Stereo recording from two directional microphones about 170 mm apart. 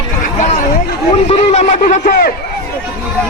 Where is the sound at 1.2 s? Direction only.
40° left (ahead or behind).